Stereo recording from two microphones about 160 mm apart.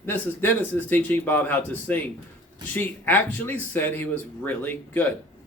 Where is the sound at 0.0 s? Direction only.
15° left (ahead or behind).